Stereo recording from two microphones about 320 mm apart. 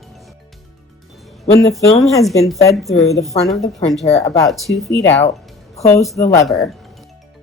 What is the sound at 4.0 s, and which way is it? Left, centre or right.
Speech, centre.